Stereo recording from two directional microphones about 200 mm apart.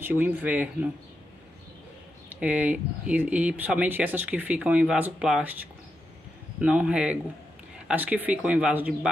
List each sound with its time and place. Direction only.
0.0 s speech: 10° right (ahead or behind)
2.2 s speech: 5° right (ahead or behind)